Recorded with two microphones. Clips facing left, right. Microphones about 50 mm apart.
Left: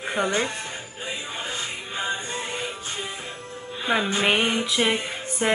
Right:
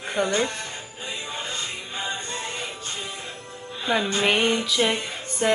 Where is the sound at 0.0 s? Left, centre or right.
Centre.